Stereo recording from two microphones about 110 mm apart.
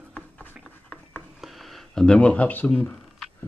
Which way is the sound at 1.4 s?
Centre (ahead or behind).